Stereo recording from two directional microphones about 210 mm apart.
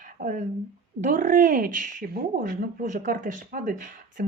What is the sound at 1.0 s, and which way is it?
Speech, 40° right (ahead or behind).